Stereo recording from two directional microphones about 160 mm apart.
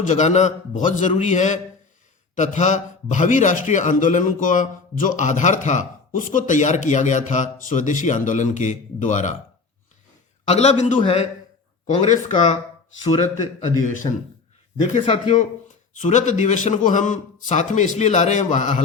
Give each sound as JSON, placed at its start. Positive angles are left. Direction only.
{"t": 0.0, "sound": "a man's voice", "side_deg": 45}
{"t": 10.4, "sound": "a man's voice", "side_deg": 45}